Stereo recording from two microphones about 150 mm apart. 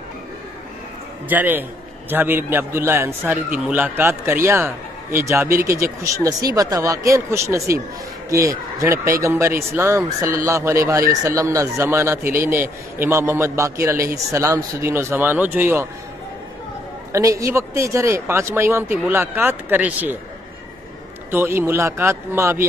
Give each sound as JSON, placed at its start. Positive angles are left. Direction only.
{"t": 1.3, "sound": "speech", "side_deg": -10}
{"t": 17.1, "sound": "speech", "side_deg": -20}
{"t": 21.3, "sound": "speech", "side_deg": -15}